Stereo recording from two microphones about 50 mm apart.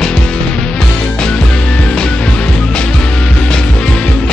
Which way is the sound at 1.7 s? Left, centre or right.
Centre.